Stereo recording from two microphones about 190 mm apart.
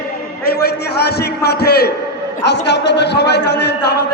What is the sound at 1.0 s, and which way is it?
A man's voice, 60° left (ahead or behind).